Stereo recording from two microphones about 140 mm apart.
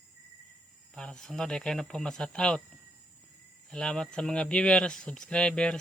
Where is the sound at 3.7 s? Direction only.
5° left (ahead or behind).